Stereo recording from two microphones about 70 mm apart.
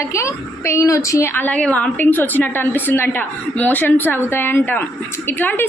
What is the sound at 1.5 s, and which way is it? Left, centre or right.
Speech, centre.